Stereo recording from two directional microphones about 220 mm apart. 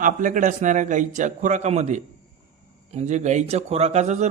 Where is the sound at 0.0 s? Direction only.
35° right (ahead or behind).